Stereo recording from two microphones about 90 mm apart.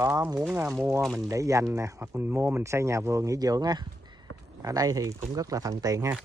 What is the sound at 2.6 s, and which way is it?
Speech, 35° right (ahead or behind).